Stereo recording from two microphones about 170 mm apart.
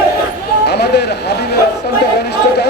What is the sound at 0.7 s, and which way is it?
Speech, 75° left (ahead or behind).